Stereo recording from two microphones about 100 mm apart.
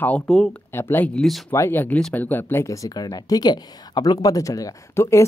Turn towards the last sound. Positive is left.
turn(degrees=30)  # may be behind; listen again after turning